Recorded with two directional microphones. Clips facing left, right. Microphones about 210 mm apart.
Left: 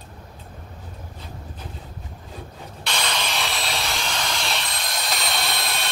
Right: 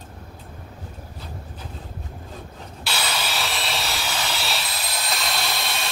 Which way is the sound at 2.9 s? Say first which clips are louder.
Left 1 dB; 5° right (ahead or behind).